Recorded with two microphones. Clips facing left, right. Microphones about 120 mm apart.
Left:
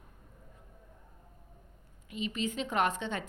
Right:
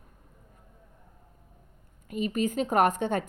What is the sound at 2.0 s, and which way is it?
A woman's voice, 50° right (ahead or behind).